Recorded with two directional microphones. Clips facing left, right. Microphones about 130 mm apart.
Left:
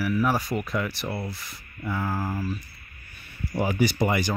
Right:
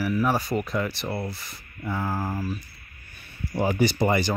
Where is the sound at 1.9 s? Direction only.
15° right (ahead or behind).